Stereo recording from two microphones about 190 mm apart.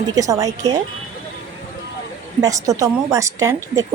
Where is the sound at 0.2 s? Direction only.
15° right (ahead or behind).